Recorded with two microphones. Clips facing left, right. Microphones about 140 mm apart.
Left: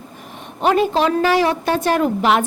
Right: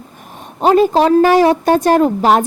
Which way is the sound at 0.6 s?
35° right (ahead or behind).